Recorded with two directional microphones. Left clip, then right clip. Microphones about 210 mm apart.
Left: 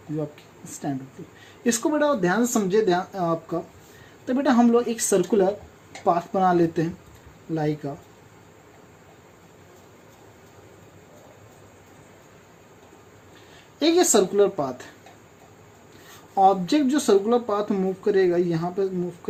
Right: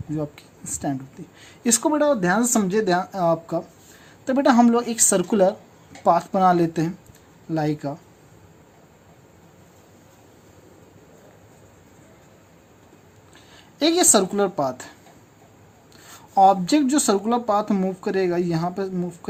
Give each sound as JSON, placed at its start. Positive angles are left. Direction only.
{"t": 1.6, "sound": "speech", "side_deg": -40}
{"t": 13.7, "sound": "speech", "side_deg": -35}
{"t": 16.3, "sound": "speech", "side_deg": -45}